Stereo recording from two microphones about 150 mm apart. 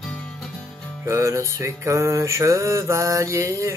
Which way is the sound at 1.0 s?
20° right (ahead or behind).